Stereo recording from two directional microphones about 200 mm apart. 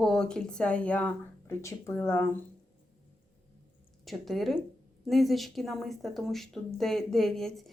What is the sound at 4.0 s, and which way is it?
Speech, centre (ahead or behind).